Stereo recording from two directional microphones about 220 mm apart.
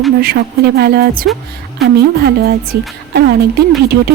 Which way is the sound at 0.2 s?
45° right (ahead or behind).